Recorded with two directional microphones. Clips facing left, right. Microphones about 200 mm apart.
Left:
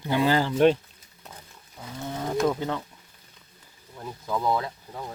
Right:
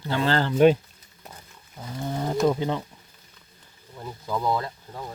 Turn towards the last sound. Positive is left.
turn(degrees=0)  # may be behind; listen again after turning